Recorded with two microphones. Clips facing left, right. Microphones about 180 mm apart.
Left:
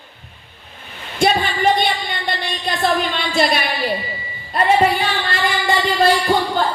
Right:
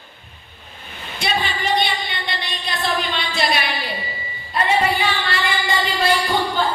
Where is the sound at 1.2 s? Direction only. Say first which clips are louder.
Left 7 dB; 50° left (ahead or behind).